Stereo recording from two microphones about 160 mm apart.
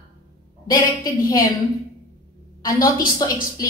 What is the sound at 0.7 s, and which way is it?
Speech, 25° left (ahead or behind).